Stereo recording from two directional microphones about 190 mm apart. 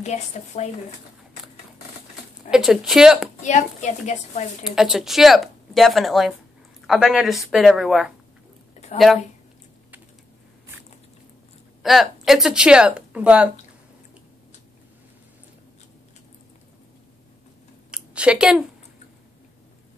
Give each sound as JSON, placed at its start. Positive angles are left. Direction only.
{"t": 0.0, "sound": "a woman's voice", "side_deg": 35}
{"t": 2.5, "sound": "speech", "side_deg": 0}
{"t": 3.4, "sound": "a woman's voice", "side_deg": 40}
{"t": 4.6, "sound": "speech", "side_deg": 0}
{"t": 11.8, "sound": "speech", "side_deg": 0}
{"t": 17.9, "sound": "a sound", "side_deg": -5}